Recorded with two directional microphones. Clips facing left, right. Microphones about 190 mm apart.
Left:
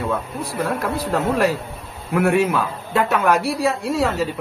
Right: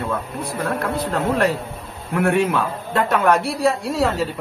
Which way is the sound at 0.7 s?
10° left (ahead or behind).